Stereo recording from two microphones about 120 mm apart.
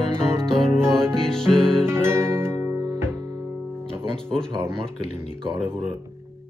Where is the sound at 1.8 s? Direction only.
20° right (ahead or behind).